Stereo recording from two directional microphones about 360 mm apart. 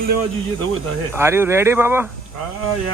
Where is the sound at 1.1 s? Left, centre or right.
Centre.